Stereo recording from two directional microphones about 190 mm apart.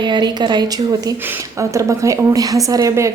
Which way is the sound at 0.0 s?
25° right (ahead or behind).